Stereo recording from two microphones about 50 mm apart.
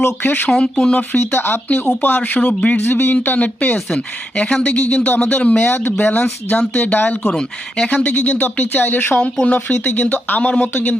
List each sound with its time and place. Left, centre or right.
0.0 s speech: left
0.5 s speech: centre
1.2 s speech: left
5.5 s speech: left
9.2 s speech: left